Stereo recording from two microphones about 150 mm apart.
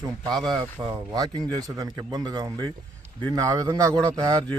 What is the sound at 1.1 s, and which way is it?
A man's voice, 25° right (ahead or behind).